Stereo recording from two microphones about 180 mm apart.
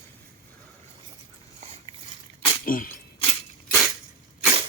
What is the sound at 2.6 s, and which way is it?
Speech, 50° left (ahead or behind).